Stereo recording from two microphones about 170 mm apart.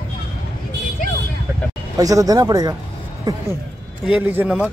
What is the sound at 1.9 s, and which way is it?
Speech, 20° right (ahead or behind).